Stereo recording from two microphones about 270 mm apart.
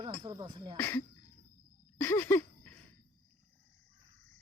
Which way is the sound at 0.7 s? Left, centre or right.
Centre.